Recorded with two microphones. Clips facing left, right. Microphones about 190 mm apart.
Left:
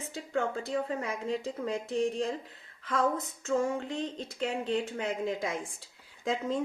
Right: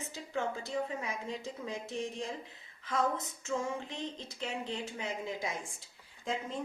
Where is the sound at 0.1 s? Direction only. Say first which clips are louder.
Left 5 dB; 60° left (ahead or behind).